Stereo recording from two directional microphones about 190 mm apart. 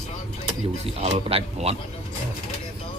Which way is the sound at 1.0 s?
30° right (ahead or behind).